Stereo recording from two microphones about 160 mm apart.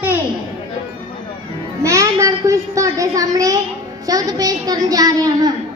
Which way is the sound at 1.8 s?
20° right (ahead or behind).